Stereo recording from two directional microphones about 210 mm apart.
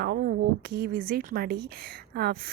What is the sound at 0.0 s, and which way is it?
A woman's voice, 50° right (ahead or behind).